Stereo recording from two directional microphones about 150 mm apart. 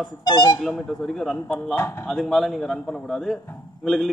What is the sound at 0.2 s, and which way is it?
Speech, 30° left (ahead or behind).